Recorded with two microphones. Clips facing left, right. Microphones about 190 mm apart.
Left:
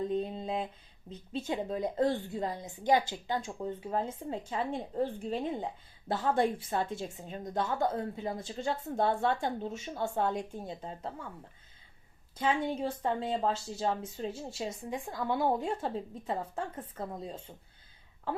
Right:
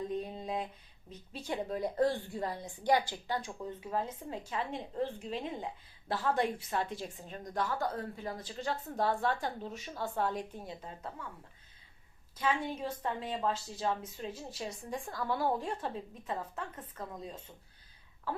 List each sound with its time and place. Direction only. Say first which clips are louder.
0.1 s mantra: left 4 dB; 25° left (ahead or behind)
1.1 s a woman's voice: left 4 dB; 25° left (ahead or behind)
12.4 s a woman's voice: left 3 dB; 30° left (ahead or behind)